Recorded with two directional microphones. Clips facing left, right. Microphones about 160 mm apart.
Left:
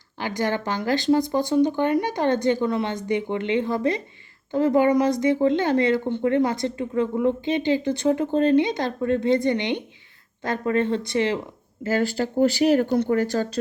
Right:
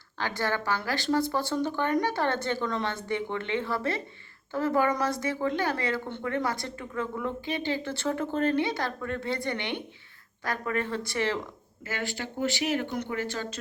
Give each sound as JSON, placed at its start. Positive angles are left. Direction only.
{"t": 0.2, "sound": "speech", "side_deg": 15}
{"t": 11.8, "sound": "speech", "side_deg": 35}